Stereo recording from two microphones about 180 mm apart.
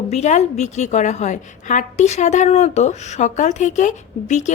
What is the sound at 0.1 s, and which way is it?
A woman's voice, 40° left (ahead or behind).